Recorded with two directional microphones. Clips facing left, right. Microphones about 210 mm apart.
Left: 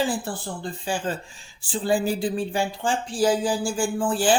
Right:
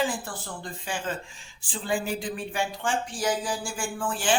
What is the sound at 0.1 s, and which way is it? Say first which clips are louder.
Speech: left 6 dB; 30° left (ahead or behind).